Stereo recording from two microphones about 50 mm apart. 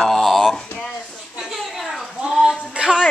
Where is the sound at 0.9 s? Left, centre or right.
Centre.